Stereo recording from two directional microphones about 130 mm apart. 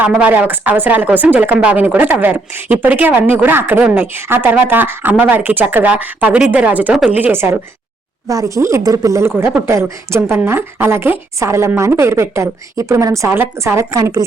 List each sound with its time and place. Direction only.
0.0 s a woman's voice: 10° right (ahead or behind)